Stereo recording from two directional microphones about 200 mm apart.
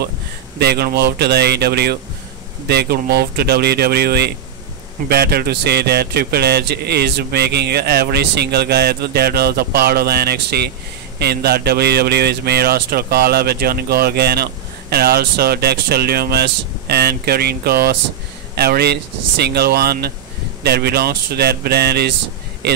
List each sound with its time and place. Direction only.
0.6 s a man's voice: 55° right (ahead or behind)